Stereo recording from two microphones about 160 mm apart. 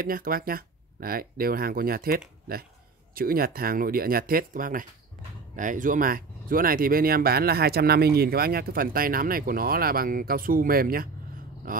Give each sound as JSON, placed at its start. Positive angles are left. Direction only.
{"t": 0.0, "sound": "speech", "side_deg": -65}